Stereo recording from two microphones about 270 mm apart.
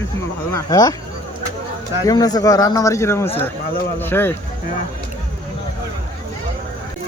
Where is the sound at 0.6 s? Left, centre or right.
Centre.